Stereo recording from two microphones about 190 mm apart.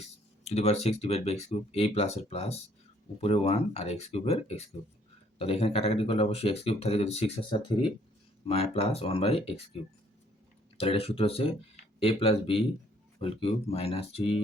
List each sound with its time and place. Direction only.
0.4 s speech: 35° left (ahead or behind)
10.8 s speech: 30° left (ahead or behind)